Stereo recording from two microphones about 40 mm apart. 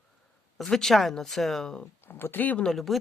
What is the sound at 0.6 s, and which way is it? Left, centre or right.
Speech, centre.